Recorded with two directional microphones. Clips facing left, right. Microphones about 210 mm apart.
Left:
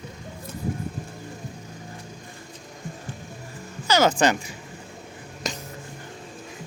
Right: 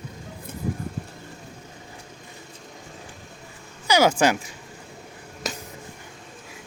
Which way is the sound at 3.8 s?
10° right (ahead or behind).